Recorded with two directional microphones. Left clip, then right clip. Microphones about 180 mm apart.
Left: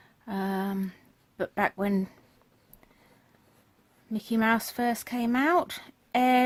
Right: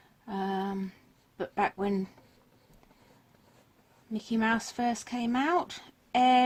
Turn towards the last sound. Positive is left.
turn(degrees=50)  # may be behind; listen again after turning